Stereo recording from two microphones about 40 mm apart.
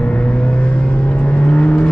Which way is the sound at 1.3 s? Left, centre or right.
Left.